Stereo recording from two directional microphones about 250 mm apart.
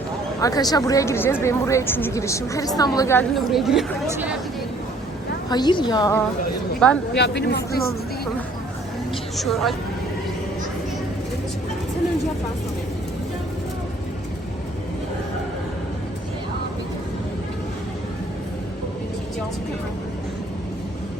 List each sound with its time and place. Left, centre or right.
0.4 s a woman's voice: centre
5.5 s a woman's voice: centre
7.2 s speech: left
9.4 s speech: centre